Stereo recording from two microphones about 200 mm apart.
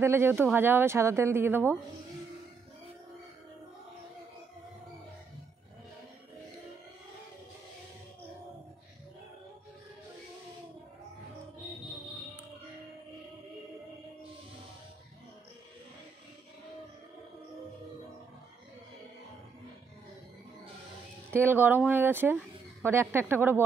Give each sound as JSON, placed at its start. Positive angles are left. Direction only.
{"t": 0.0, "sound": "speech", "side_deg": -10}
{"t": 21.3, "sound": "speech", "side_deg": -10}